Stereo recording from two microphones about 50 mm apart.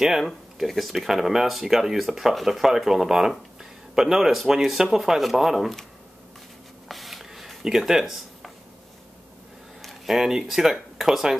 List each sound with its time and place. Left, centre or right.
0.0 s speech: centre
6.9 s a sound: centre
9.8 s speech: centre